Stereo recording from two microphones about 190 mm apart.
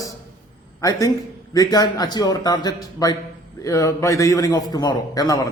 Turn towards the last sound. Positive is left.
turn(degrees=20)  # may be behind; listen again after turning